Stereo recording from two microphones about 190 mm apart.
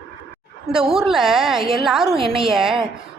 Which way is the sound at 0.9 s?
Centre (ahead or behind).